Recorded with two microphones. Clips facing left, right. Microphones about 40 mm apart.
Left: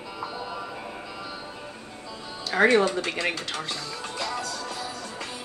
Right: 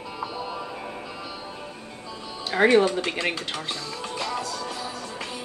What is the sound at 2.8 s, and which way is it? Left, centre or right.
Music, centre.